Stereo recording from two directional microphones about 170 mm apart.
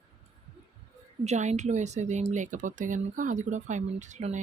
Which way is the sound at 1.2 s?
40° right (ahead or behind).